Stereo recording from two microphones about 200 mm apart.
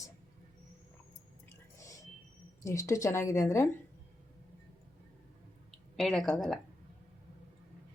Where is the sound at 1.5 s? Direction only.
15° left (ahead or behind).